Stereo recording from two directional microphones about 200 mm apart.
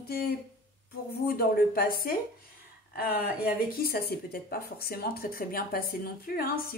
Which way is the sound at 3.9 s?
50° left (ahead or behind).